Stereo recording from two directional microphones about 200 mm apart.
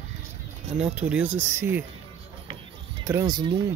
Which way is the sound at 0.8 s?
5° right (ahead or behind).